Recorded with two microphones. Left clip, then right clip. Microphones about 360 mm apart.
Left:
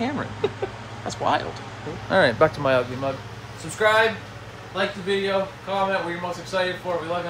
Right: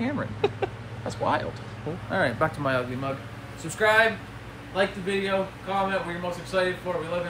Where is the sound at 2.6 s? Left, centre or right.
Centre.